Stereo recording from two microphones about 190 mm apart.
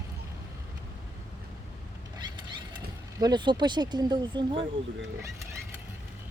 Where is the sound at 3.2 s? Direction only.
20° right (ahead or behind).